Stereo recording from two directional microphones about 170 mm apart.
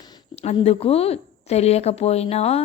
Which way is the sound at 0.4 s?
35° left (ahead or behind).